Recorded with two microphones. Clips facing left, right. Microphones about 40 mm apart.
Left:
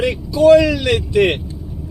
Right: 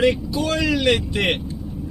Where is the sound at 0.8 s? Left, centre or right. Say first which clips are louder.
Left 4 dB; right.